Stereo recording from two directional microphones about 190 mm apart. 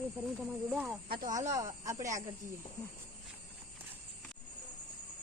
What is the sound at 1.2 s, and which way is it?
Speech, 40° right (ahead or behind).